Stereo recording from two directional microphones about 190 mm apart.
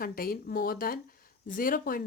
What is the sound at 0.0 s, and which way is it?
Speech, 50° left (ahead or behind).